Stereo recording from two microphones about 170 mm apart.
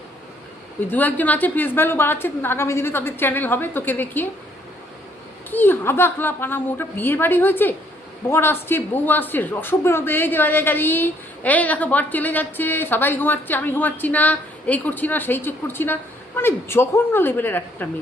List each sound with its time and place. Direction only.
0.9 s speech: 10° left (ahead or behind)
5.5 s speech: 10° left (ahead or behind)